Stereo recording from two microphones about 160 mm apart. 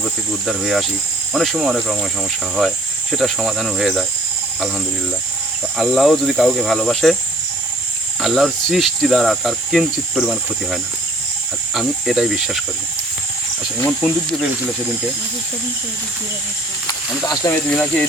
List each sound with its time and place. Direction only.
0.0 s cricket: centre (ahead or behind)
5.7 s cricket: centre (ahead or behind)
8.2 s cricket: centre (ahead or behind)
14.0 s cricket: centre (ahead or behind)
16.8 s speech: 25° left (ahead or behind)
17.5 s speech: 5° left (ahead or behind)